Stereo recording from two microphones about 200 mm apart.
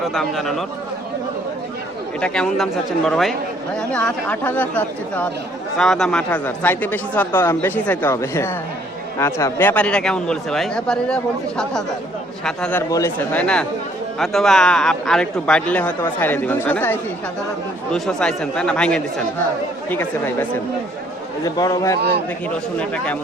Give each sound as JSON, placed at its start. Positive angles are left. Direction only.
{"t": 0.1, "sound": "speech", "side_deg": 0}
{"t": 2.2, "sound": "speech", "side_deg": 5}
{"t": 21.4, "sound": "a man's voice", "side_deg": 20}